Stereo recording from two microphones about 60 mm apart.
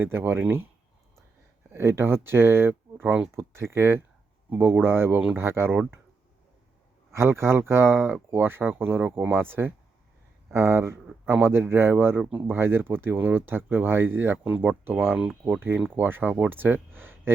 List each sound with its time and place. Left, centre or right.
0.0 s speech: right
1.7 s speech: right
4.4 s speech: right
7.1 s speech: right
12.2 s speech: centre
12.5 s speech: right
15.2 s speech: centre
15.9 s speech: right